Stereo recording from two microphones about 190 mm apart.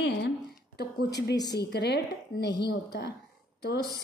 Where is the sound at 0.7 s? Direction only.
60° left (ahead or behind).